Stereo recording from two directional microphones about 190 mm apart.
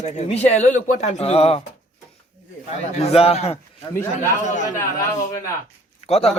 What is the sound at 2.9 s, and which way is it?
Speech, 35° left (ahead or behind).